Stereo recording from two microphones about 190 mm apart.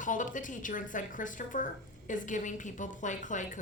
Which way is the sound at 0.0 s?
45° left (ahead or behind).